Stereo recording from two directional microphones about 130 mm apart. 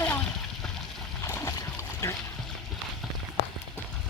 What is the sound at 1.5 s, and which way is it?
Splash, 25° left (ahead or behind).